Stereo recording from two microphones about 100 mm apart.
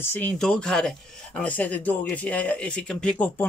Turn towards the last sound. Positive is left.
turn(degrees=15)  # may be behind; listen again after turning